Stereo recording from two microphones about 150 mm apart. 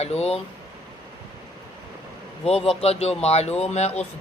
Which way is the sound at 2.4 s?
45° left (ahead or behind).